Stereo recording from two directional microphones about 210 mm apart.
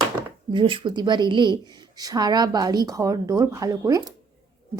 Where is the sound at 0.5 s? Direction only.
25° right (ahead or behind).